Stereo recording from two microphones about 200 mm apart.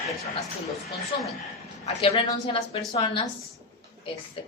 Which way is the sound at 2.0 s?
25° left (ahead or behind).